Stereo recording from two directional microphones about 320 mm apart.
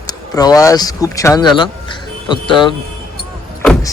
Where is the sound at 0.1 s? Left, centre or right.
Centre.